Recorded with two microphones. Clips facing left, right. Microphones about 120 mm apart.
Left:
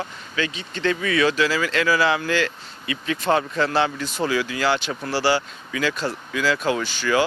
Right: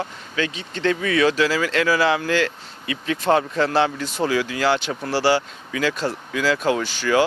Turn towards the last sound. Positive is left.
turn(degrees=-50)  # may be behind; listen again after turning